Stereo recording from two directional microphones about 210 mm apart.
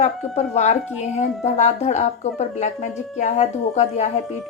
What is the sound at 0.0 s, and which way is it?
Speech, 35° left (ahead or behind).